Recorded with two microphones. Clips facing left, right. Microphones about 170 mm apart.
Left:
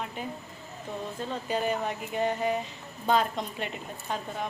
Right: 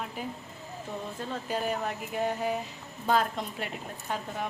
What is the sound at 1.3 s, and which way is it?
A woman's voice, centre (ahead or behind).